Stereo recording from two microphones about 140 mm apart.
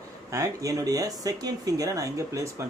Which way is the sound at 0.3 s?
25° right (ahead or behind).